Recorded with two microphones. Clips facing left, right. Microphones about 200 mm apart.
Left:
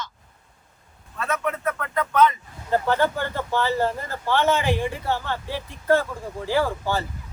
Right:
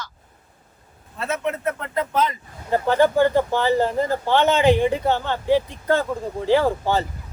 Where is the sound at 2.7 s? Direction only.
15° right (ahead or behind).